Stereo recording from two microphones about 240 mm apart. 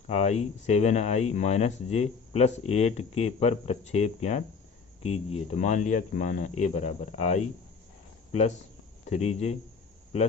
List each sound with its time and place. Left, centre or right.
0.1 s speech: left